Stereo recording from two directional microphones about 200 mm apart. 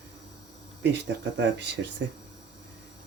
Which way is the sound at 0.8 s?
60° right (ahead or behind).